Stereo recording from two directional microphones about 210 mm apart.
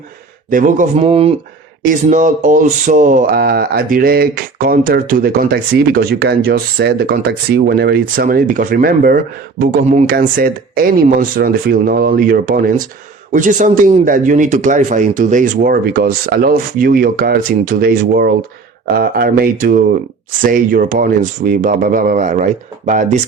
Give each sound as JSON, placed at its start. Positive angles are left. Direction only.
{"t": 0.5, "sound": "speech", "side_deg": -35}
{"t": 1.8, "sound": "speech", "side_deg": -40}